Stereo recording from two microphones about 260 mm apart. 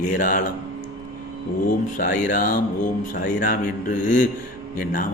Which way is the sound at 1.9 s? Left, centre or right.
Left.